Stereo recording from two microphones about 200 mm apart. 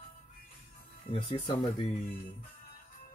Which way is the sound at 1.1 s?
25° left (ahead or behind).